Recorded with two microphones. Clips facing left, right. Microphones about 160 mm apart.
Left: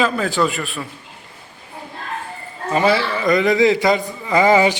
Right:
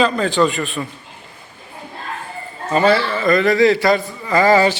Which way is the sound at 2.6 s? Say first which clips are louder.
Right 2 dB; 10° left (ahead or behind).